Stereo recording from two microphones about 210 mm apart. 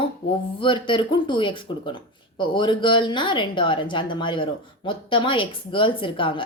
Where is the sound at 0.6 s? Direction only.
25° left (ahead or behind).